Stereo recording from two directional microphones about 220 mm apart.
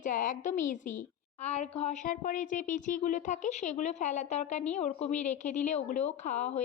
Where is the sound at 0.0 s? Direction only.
35° left (ahead or behind).